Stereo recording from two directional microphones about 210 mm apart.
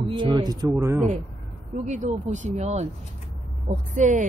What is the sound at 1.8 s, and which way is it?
A woman's voice, 35° right (ahead or behind).